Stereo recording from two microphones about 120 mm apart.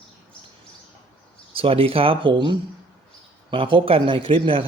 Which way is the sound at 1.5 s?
50° right (ahead or behind).